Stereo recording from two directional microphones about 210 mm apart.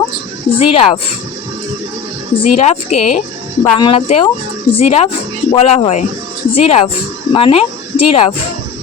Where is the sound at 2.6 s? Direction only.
30° left (ahead or behind).